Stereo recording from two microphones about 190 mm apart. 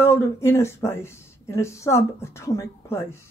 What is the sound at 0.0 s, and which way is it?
Speech, 10° left (ahead or behind).